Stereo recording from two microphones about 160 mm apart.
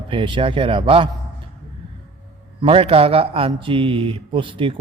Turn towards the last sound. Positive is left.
turn(degrees=-30)  # may be behind; listen again after turning